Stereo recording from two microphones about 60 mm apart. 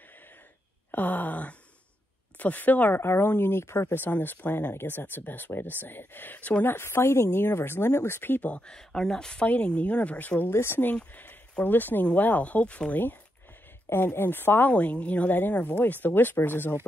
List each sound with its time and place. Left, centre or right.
0.9 s speech: left
3.0 s speech: left; by 9.5 s centre
9.5 s speech: left
10.5 s speech: left
13.8 s speech: left
14.7 s speech: left